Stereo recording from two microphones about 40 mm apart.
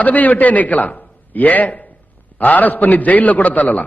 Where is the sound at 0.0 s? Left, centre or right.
Left.